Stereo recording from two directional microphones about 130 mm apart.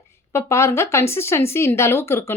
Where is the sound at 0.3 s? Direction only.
20° left (ahead or behind).